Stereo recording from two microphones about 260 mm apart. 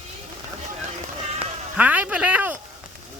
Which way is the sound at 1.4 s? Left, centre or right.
Centre.